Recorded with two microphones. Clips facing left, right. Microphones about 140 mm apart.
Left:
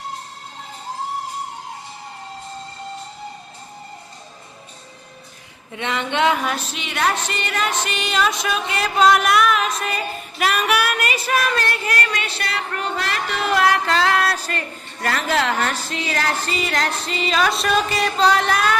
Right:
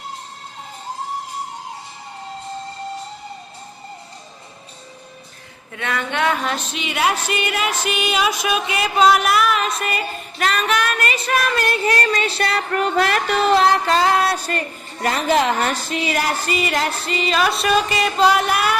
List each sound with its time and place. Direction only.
5.7 s speech: 20° left (ahead or behind)
6.4 s music: 5° left (ahead or behind)
10.4 s female singing: 10° left (ahead or behind)
11.9 s speech: 30° right (ahead or behind)
13.4 s a woman's voice: 25° right (ahead or behind); by 18.8 s 10° right (ahead or behind)